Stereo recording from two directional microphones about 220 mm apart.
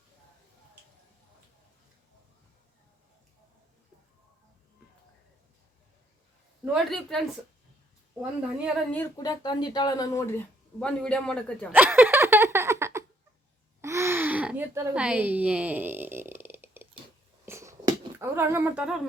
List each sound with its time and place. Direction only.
6.7 s a man's voice: centre (ahead or behind)
8.9 s speech: 15° left (ahead or behind)
10.8 s a man's voice: 5° left (ahead or behind)
11.7 s a sound: 10° right (ahead or behind)